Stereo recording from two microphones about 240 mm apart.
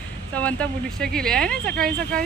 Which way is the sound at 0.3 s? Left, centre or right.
Centre.